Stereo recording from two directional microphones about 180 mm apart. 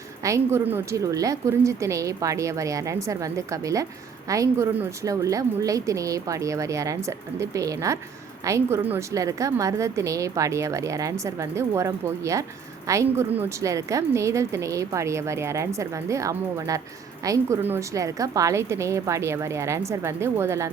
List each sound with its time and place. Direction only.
0.2 s a woman's voice: 15° right (ahead or behind)